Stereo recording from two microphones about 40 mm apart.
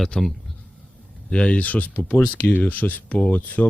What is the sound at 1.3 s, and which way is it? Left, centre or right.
Speech, left.